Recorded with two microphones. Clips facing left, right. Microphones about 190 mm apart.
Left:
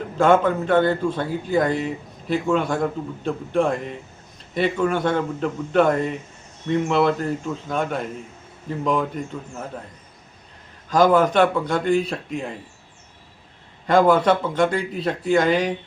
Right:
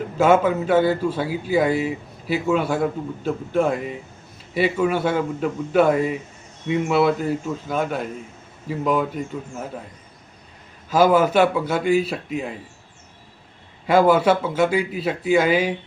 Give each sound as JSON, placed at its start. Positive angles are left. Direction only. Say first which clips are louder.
{"t": 0.2, "sound": "a man's voice", "louder": "even", "side_deg": -5}
{"t": 10.8, "sound": "a man's voice", "louder": "even", "side_deg": -5}
{"t": 13.8, "sound": "a man's voice", "louder": "even", "side_deg": -5}